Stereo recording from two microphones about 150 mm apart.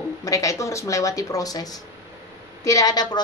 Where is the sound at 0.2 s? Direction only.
20° left (ahead or behind).